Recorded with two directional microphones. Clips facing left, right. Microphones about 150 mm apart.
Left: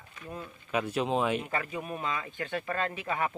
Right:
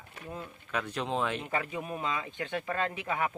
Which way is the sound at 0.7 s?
10° left (ahead or behind).